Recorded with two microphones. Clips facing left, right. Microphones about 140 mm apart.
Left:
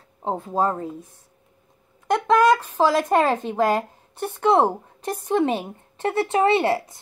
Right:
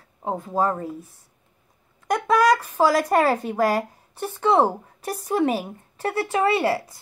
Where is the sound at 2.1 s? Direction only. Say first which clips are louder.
Left 2 dB; 10° right (ahead or behind).